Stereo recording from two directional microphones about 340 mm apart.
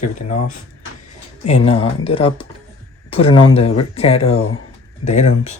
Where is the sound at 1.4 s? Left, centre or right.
Centre.